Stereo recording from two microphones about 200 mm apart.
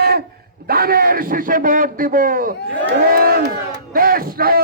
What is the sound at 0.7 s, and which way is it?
A man's voice, 50° right (ahead or behind).